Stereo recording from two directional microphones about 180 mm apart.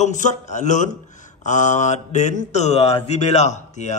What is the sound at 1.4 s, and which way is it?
Mantra, 45° left (ahead or behind).